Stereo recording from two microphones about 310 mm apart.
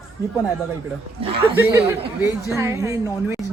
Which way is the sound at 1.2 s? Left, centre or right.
Centre.